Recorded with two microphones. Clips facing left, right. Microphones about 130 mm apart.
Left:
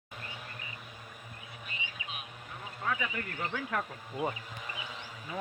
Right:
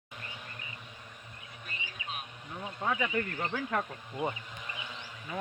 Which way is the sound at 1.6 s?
40° right (ahead or behind).